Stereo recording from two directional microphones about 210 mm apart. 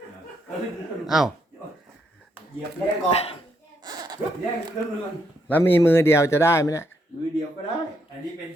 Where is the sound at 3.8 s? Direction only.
20° right (ahead or behind).